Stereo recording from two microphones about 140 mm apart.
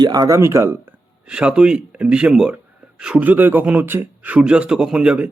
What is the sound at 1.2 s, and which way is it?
A man's voice, 5° right (ahead or behind).